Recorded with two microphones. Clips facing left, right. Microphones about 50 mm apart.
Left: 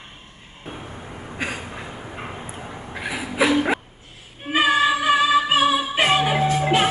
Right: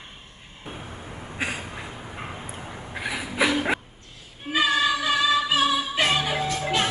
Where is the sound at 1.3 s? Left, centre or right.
Centre.